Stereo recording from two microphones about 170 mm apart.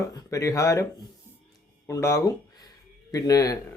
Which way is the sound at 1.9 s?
15° left (ahead or behind).